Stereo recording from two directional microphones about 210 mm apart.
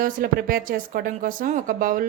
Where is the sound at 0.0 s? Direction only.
45° right (ahead or behind).